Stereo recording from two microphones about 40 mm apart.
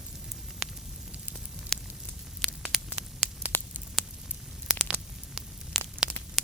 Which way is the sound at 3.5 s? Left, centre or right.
Left.